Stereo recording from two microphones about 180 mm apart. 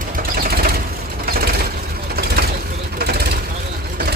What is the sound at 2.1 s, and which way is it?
Vehicle, 60° right (ahead or behind).